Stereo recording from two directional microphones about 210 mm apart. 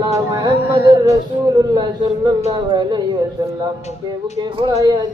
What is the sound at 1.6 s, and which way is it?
Speech, 20° right (ahead or behind).